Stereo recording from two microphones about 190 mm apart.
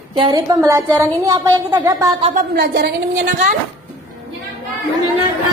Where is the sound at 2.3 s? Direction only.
55° right (ahead or behind).